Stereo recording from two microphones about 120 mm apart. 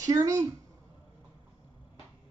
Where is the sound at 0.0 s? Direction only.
30° right (ahead or behind).